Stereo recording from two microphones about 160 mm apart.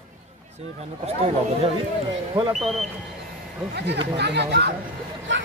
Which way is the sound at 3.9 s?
90° right.